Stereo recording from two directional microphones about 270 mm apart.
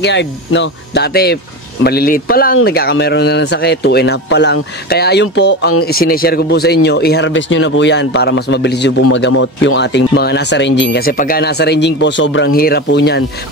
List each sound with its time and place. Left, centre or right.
0.0 s speech: left
9.0 s speech: left